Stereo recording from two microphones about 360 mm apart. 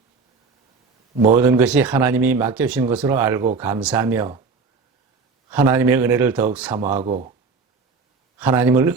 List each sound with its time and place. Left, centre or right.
1.4 s speech: centre
5.5 s speech: centre
7.0 s speech: centre
8.4 s speech: centre